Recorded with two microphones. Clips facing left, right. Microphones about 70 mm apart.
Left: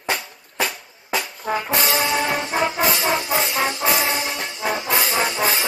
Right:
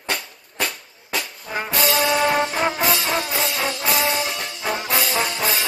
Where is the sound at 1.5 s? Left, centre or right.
Left.